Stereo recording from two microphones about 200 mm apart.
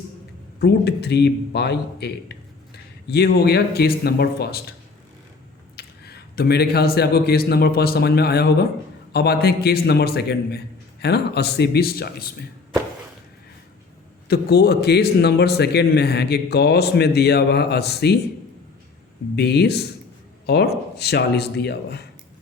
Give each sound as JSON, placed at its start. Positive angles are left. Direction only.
{"t": 0.6, "sound": "a man's voice", "side_deg": 55}
{"t": 5.7, "sound": "a man's voice", "side_deg": 50}
{"t": 14.3, "sound": "a man's voice", "side_deg": 55}
{"t": 19.4, "sound": "a man's voice", "side_deg": 55}